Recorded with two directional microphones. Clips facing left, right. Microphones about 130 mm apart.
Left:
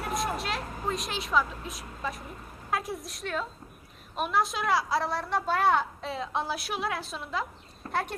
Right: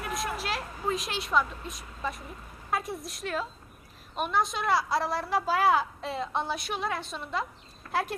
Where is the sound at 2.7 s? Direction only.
Centre (ahead or behind).